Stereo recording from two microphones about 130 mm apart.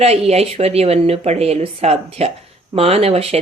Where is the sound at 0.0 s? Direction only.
55° right (ahead or behind).